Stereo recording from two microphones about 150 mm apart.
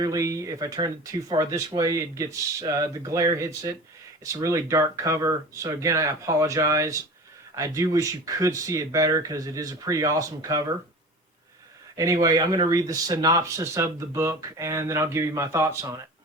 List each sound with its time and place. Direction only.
0.0 s speech: 20° right (ahead or behind)
11.9 s speech: 25° right (ahead or behind)